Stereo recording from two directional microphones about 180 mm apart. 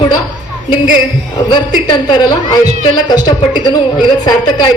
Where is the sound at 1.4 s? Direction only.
25° left (ahead or behind).